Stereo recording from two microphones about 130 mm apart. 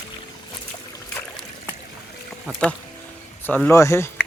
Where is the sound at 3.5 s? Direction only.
10° left (ahead or behind).